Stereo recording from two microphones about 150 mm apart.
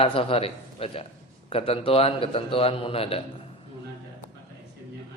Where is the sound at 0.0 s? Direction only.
40° left (ahead or behind).